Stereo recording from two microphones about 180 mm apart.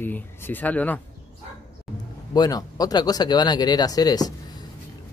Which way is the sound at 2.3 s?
20° left (ahead or behind).